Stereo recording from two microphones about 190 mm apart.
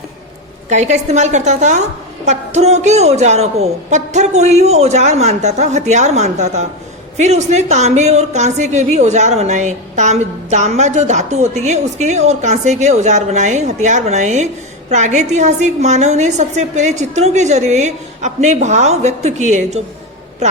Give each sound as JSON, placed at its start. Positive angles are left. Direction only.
{"t": 0.7, "sound": "a woman's voice", "side_deg": -35}